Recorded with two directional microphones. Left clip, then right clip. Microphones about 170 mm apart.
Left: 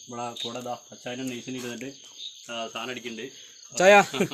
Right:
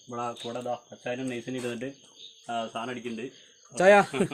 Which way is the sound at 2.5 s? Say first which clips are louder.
Right 2 dB; 65° right (ahead or behind).